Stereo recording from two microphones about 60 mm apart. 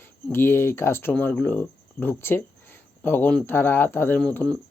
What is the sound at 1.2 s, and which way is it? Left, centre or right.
Speech, left.